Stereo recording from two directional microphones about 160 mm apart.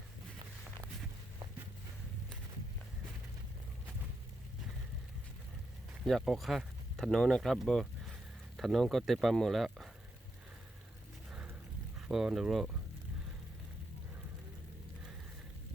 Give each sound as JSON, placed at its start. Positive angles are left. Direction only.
{"t": 6.1, "sound": "speech", "side_deg": 0}
{"t": 11.3, "sound": "boat", "side_deg": -5}
{"t": 11.9, "sound": "speech", "side_deg": -5}